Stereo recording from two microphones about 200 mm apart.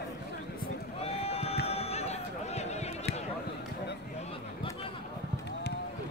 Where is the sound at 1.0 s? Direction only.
30° left (ahead or behind).